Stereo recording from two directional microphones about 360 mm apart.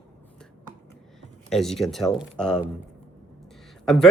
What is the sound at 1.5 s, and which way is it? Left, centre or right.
Speech, centre.